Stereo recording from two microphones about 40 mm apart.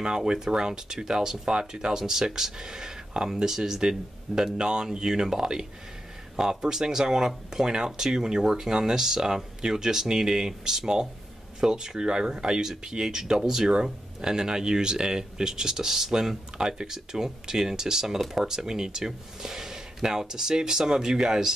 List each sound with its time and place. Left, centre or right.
0.0 s speech: centre